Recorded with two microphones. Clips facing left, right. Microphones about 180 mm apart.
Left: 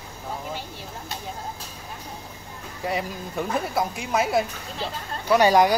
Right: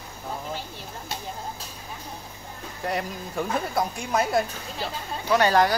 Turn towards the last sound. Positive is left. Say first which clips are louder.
# left 3 dB
turn(degrees=15)  # may be behind; listen again after turning